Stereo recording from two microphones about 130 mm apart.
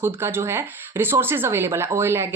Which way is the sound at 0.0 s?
20° right (ahead or behind).